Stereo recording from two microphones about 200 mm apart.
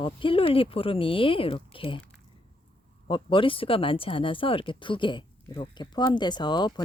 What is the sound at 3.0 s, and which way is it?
Speech, 25° left (ahead or behind).